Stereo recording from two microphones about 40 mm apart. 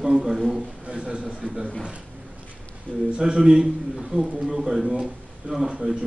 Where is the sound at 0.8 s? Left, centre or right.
Right.